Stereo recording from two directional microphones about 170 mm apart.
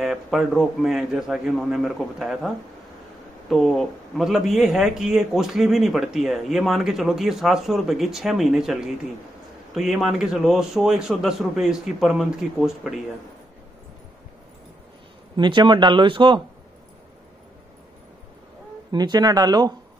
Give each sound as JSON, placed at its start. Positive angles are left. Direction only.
{"t": 0.0, "sound": "a man's voice", "side_deg": 0}
{"t": 15.3, "sound": "speech", "side_deg": -30}
{"t": 18.9, "sound": "speech", "side_deg": -25}